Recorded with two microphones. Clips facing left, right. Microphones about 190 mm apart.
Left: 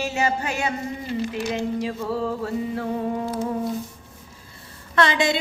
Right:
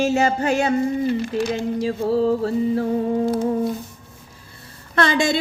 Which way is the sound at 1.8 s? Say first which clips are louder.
Right 6 dB; 35° right (ahead or behind).